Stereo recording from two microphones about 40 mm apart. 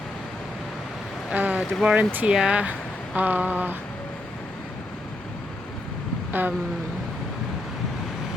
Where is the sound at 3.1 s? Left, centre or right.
Right.